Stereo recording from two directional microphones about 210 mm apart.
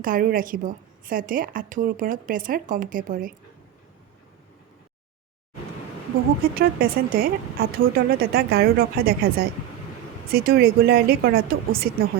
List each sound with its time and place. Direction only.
0.0 s a woman's voice: 40° right (ahead or behind)
6.5 s speech: 45° right (ahead or behind)